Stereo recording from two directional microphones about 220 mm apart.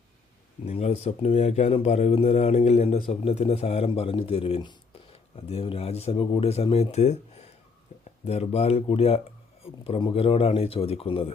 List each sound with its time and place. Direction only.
0.6 s speech: 30° left (ahead or behind)